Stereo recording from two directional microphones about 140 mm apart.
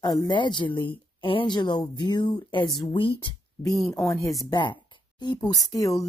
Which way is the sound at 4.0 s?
20° left (ahead or behind).